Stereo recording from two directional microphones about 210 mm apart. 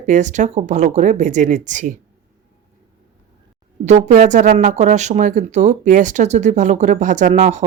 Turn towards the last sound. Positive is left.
turn(degrees=-35)  # may be behind; listen again after turning